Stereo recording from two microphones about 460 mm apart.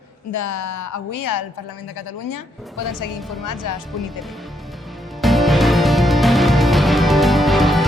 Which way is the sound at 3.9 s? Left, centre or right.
Centre.